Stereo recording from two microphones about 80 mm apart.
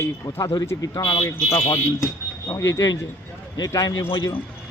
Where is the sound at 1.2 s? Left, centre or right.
Left.